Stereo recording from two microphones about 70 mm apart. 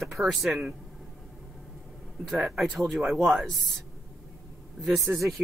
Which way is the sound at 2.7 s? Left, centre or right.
Centre.